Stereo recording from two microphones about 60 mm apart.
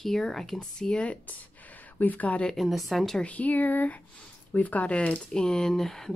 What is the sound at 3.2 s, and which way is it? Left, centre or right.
Speech, left.